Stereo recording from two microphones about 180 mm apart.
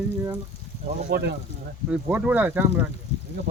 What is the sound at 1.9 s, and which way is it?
Speech, 5° right (ahead or behind).